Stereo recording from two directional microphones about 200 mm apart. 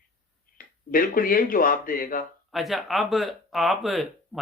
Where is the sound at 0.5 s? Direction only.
45° left (ahead or behind).